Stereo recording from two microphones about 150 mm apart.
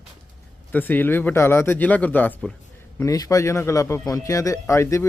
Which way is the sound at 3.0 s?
20° left (ahead or behind).